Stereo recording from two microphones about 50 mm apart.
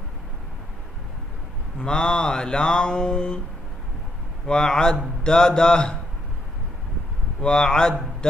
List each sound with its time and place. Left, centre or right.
1.8 s mantra: centre
4.5 s mantra: centre
7.4 s mantra: centre